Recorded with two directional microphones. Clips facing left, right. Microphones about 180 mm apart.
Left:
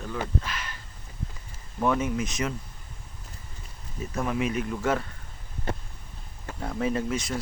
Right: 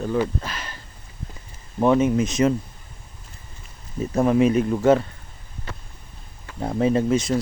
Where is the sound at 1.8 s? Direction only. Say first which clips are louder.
Right 8 dB; 25° right (ahead or behind).